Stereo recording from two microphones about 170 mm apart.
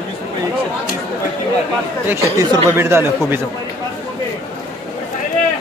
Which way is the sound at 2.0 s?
20° right (ahead or behind).